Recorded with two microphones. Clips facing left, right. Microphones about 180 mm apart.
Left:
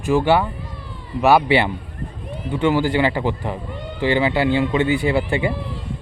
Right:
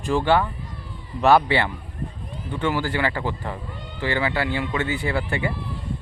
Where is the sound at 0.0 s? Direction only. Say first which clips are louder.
Left 3 dB; 5° left (ahead or behind).